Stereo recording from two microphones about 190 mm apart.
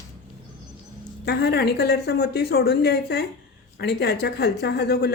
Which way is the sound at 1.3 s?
60° left (ahead or behind).